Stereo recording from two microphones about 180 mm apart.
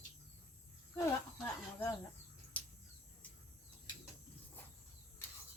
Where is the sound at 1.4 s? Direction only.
15° left (ahead or behind).